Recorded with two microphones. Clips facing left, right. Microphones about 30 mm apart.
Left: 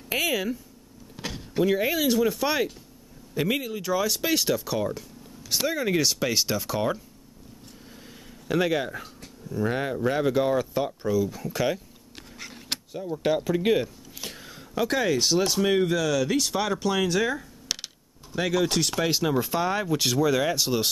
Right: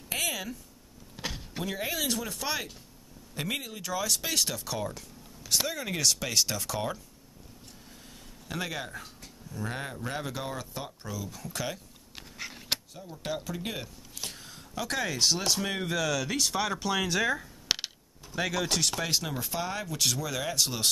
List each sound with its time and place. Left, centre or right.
0.1 s a sound: centre
1.1 s vehicle: centre
1.6 s speech: centre
8.5 s speech: centre
12.2 s a sound: centre
13.1 s speech: left
14.9 s speech: centre
17.6 s a sound: centre
18.3 s speech: centre